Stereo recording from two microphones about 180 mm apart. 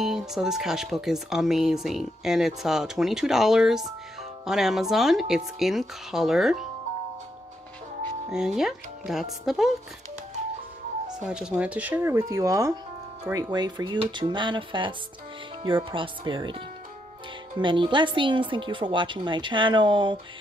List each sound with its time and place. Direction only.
0.0 s speech: centre (ahead or behind)
8.3 s speech: 5° right (ahead or behind)
11.2 s speech: 5° right (ahead or behind); by 20.2 s 25° right (ahead or behind)